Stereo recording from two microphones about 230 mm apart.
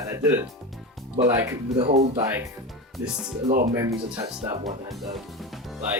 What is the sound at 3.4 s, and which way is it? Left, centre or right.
Speech, right.